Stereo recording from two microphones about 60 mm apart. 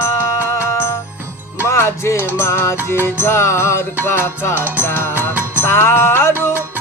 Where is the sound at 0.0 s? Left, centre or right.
Left.